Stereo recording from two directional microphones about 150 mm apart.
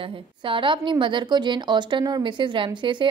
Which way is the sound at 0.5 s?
35° right (ahead or behind).